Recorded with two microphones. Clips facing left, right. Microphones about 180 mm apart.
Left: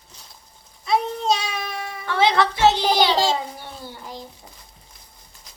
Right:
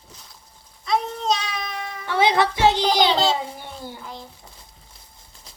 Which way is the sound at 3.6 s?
15° right (ahead or behind).